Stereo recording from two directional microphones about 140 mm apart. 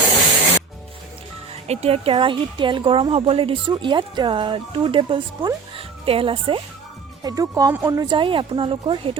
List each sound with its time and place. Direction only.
1.6 s speech: 50° right (ahead or behind)
7.2 s speech: 25° right (ahead or behind)